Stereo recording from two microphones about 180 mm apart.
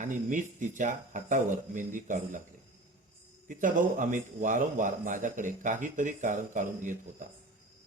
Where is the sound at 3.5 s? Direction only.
45° right (ahead or behind).